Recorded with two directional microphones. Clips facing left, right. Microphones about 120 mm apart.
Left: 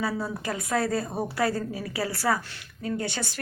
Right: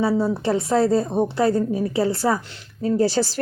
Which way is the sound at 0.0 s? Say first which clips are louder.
Right 9 dB; 25° right (ahead or behind).